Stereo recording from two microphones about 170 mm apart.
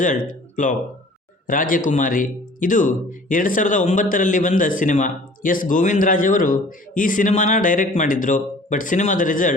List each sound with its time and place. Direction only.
0.5 s speech: 50° left (ahead or behind)